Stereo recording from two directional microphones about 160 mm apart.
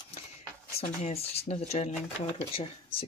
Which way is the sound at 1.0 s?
40° left (ahead or behind).